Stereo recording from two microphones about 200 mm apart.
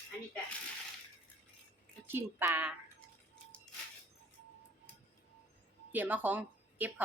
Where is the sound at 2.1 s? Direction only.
10° right (ahead or behind).